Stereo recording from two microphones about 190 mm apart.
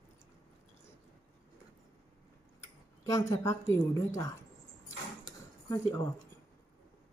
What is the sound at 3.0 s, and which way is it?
A woman's voice, 15° left (ahead or behind).